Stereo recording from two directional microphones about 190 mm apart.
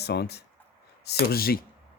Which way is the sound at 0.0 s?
60° left (ahead or behind).